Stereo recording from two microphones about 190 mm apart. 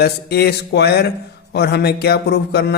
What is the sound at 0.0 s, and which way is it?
Speech, 60° left (ahead or behind).